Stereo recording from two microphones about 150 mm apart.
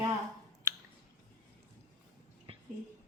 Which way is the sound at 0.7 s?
15° right (ahead or behind).